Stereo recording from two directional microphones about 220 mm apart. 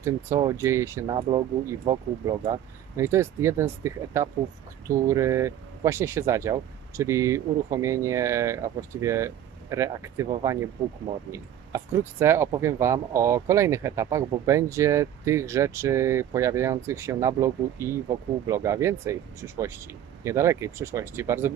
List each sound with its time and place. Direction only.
0.0 s speech: 15° right (ahead or behind)